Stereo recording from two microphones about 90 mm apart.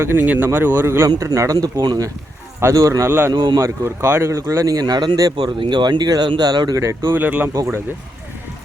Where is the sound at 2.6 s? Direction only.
35° right (ahead or behind).